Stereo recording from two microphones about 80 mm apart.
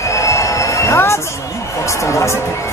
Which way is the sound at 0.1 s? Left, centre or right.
Left.